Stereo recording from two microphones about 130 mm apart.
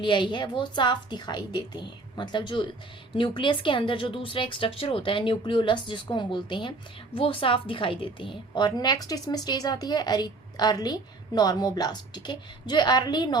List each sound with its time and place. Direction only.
0.0 s speech: 35° left (ahead or behind)